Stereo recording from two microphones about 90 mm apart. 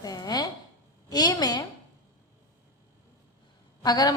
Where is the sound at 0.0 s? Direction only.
45° left (ahead or behind).